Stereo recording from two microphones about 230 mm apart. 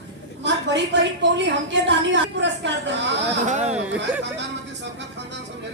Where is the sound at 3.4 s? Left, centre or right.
Right.